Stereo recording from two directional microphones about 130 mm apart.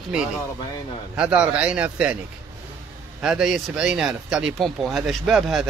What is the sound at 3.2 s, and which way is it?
Speech, 5° right (ahead or behind).